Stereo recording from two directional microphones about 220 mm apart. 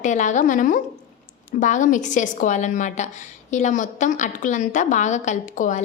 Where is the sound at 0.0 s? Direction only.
35° left (ahead or behind).